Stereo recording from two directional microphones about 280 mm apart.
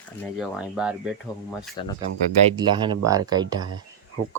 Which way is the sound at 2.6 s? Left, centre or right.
Centre.